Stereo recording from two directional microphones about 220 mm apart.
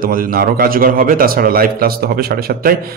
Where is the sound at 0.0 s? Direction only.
40° right (ahead or behind).